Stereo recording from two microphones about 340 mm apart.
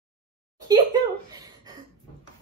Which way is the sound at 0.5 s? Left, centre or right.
Centre.